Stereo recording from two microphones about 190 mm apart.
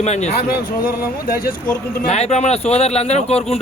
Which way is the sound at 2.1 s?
35° left (ahead or behind).